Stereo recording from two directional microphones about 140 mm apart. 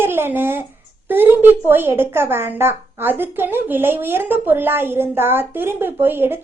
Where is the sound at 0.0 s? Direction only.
15° right (ahead or behind).